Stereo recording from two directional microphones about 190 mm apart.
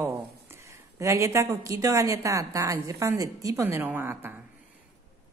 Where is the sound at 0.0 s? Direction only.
15° right (ahead or behind).